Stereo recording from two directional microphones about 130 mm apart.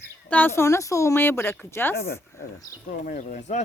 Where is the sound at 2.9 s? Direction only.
90° left.